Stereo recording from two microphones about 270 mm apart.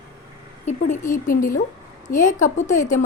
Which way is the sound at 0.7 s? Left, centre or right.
Left.